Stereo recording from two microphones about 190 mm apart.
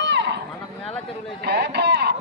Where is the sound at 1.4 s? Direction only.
60° right (ahead or behind).